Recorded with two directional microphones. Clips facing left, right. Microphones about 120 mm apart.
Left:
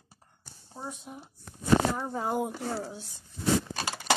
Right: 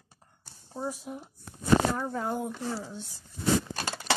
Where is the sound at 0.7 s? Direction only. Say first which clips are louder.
Right 6 dB; 5° right (ahead or behind).